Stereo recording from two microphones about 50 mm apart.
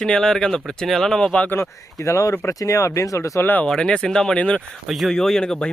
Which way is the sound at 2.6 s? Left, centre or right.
Left.